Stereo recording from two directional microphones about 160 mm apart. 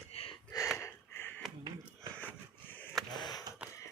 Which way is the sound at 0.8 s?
15° left (ahead or behind).